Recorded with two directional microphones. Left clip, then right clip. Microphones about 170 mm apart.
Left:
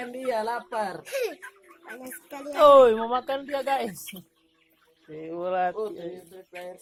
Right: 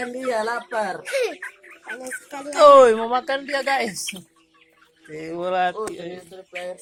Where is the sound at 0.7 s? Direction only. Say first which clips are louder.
Right 5 dB; 20° left (ahead or behind).